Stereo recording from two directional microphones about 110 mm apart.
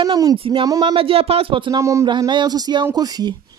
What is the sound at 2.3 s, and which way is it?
A woman's voice, 40° right (ahead or behind).